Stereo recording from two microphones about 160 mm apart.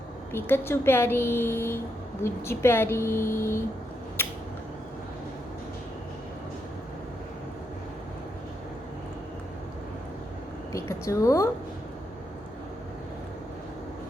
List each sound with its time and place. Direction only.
0.3 s a woman's voice: 15° left (ahead or behind)
4.2 s a sound: 15° left (ahead or behind)
10.7 s a woman's voice: 20° left (ahead or behind)